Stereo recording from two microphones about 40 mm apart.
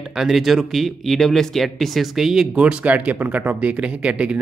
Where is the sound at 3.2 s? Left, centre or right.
Right.